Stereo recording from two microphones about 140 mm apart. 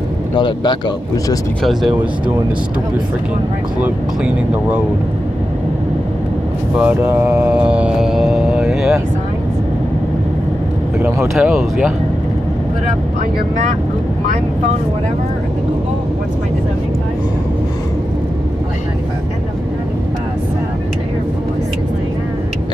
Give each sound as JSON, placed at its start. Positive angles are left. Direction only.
{"t": 0.4, "sound": "speech", "side_deg": 30}
{"t": 1.6, "sound": "speech", "side_deg": 0}
{"t": 3.8, "sound": "speech", "side_deg": -10}
{"t": 6.8, "sound": "speech", "side_deg": -10}
{"t": 7.5, "sound": "music", "side_deg": -10}
{"t": 11.0, "sound": "speech", "side_deg": -15}
{"t": 11.3, "sound": "speech", "side_deg": -5}